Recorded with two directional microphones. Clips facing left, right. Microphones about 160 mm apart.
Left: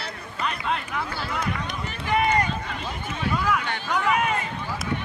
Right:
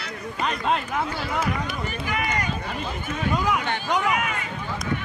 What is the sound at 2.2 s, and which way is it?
Run, 30° left (ahead or behind).